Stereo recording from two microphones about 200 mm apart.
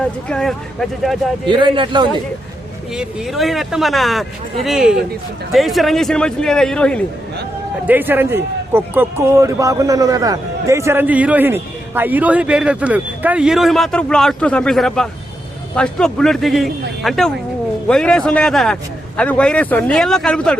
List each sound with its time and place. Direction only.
0.0 s a man's voice: 5° left (ahead or behind)
1.5 s a man's voice: 25° right (ahead or behind)
2.9 s a man's voice: 5° right (ahead or behind)
7.9 s a man's voice: 10° right (ahead or behind)